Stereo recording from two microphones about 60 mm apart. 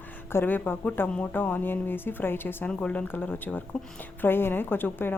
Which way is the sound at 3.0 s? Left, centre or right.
Left.